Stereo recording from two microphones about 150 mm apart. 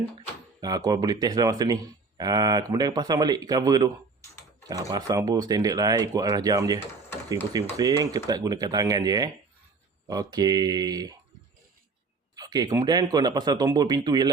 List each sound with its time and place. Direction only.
0.6 s speech: 25° right (ahead or behind)
12.4 s a sound: 25° right (ahead or behind)
12.8 s speech: 25° right (ahead or behind)